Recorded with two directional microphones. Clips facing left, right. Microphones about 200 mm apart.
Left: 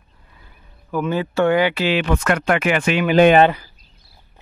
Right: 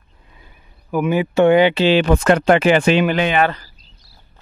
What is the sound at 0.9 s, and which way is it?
Speech, 15° right (ahead or behind).